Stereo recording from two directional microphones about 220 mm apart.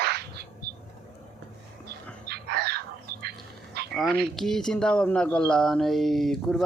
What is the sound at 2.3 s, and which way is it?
Bird, 45° right (ahead or behind).